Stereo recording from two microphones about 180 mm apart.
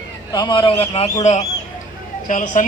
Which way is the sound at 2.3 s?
45° left (ahead or behind).